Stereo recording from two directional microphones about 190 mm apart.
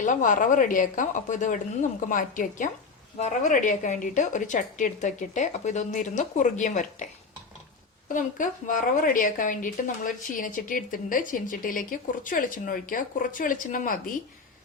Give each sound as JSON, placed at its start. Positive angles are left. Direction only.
{"t": 0.0, "sound": "a woman's voice", "side_deg": 40}